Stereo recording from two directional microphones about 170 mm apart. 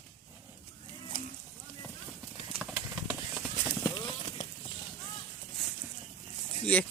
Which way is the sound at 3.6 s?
20° left (ahead or behind).